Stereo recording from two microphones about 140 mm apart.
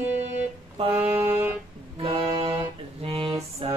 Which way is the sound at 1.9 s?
40° right (ahead or behind).